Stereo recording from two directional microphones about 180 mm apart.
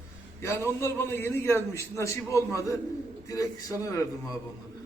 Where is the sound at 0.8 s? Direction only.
15° left (ahead or behind).